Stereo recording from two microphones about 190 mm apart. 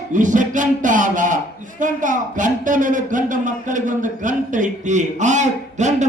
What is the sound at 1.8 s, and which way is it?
A man's voice, 45° right (ahead or behind).